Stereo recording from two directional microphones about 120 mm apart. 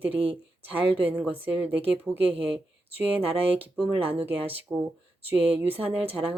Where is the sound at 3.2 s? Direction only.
50° right (ahead or behind).